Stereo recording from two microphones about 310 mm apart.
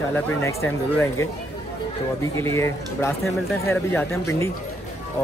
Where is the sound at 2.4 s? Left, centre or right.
Centre.